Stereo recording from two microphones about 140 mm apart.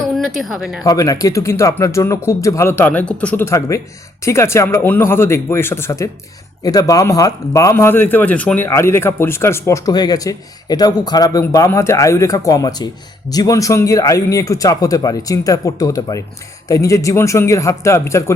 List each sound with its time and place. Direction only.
0.3 s speech: centre (ahead or behind)
0.9 s speech: 25° left (ahead or behind)